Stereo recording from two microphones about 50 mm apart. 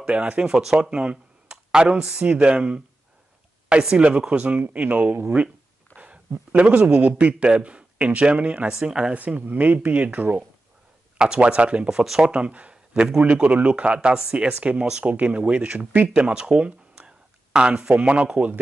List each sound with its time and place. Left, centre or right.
0.0 s speech: right
0.5 s speech: centre
2.2 s a man's voice: right
9.1 s speech: right
11.1 s speech: right
11.9 s speech: centre
12.2 s speech: right